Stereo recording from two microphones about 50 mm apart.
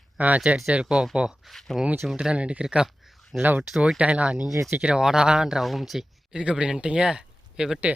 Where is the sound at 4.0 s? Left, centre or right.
Right.